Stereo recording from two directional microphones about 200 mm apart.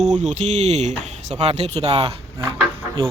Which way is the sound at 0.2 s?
35° right (ahead or behind).